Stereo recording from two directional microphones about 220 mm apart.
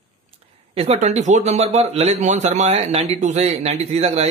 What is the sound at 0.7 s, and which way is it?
Speech, 30° right (ahead or behind).